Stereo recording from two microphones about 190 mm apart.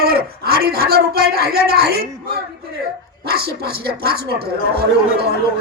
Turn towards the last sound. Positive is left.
turn(degrees=-55)  # may be behind; listen again after turning